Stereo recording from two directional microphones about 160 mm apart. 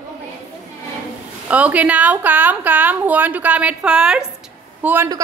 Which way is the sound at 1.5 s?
10° right (ahead or behind).